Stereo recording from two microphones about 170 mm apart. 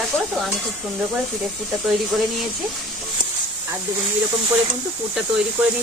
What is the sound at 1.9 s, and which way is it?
Speech, centre (ahead or behind).